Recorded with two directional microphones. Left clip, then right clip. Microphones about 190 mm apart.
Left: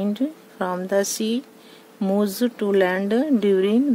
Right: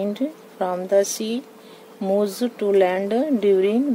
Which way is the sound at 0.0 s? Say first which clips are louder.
Right 1 dB; 40° left (ahead or behind).